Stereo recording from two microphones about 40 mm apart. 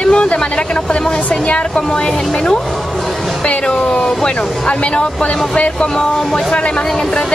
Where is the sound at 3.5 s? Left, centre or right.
Left.